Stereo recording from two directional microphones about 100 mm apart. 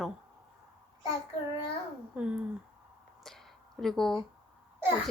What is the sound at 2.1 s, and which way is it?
Speech, 10° right (ahead or behind).